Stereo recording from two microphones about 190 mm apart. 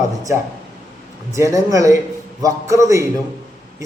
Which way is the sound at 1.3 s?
15° right (ahead or behind).